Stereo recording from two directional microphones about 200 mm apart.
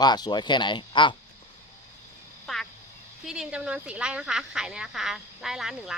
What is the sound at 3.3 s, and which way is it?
Speech, 5° right (ahead or behind).